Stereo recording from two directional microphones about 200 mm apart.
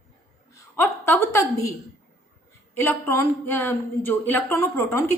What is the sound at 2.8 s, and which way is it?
Speech, 10° left (ahead or behind).